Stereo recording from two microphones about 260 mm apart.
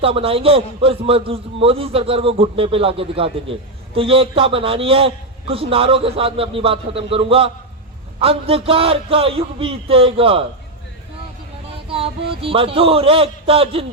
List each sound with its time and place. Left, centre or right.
0.0 s a man's voice: right
11.9 s a man's voice: right